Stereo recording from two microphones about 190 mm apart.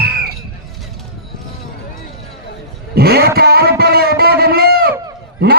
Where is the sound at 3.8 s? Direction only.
55° right (ahead or behind).